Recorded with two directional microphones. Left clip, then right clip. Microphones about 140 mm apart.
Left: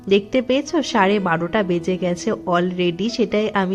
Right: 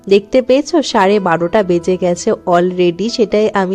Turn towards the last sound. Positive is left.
turn(degrees=-35)  # may be behind; listen again after turning